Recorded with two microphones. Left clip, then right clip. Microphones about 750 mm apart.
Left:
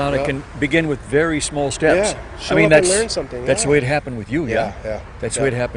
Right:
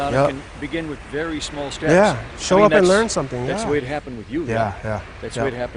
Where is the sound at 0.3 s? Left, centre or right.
Left.